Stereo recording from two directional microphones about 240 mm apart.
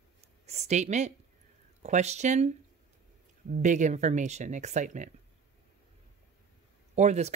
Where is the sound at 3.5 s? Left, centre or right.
Right.